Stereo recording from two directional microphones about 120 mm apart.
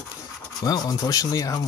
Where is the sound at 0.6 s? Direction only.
30° left (ahead or behind).